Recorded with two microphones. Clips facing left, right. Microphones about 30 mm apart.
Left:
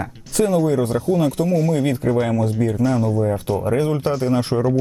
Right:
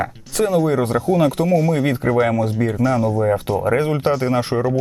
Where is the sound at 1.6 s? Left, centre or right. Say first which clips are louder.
Right 1 dB; centre.